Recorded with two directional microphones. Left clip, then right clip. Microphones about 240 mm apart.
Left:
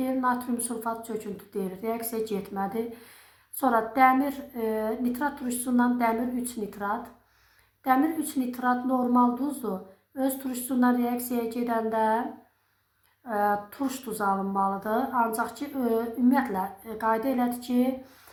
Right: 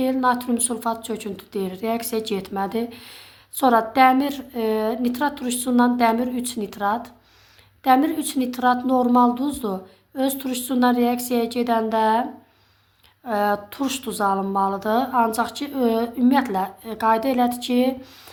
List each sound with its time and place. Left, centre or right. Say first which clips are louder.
0.0 s a woman's voice: right 7 dB; right
8.4 s a woman's voice: right 8 dB; right
13.2 s a woman's voice: right 4 dB; right